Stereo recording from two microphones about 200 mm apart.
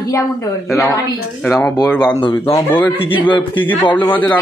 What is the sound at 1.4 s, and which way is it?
Speech, 5° left (ahead or behind).